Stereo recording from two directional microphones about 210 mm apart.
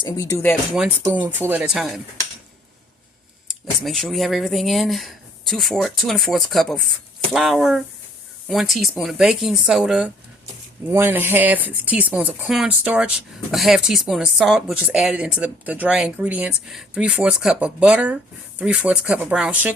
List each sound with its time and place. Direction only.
0.0 s speech: 15° left (ahead or behind)
1.0 s speech: 15° right (ahead or behind)
3.8 s speech: centre (ahead or behind)